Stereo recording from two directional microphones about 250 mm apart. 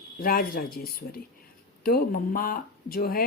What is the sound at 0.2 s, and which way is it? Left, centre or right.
Speech, left.